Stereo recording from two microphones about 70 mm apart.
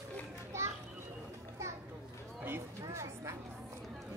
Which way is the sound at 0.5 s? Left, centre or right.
Right.